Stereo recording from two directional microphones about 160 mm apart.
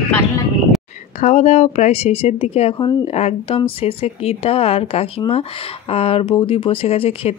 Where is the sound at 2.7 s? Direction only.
25° left (ahead or behind).